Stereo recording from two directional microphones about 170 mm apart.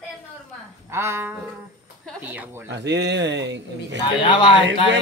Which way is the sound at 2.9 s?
90° right.